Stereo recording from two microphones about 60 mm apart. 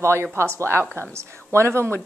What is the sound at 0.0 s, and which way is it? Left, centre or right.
A woman's voice, right.